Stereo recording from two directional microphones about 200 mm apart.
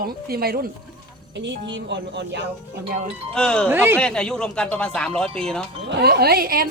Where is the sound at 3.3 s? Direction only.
5° left (ahead or behind).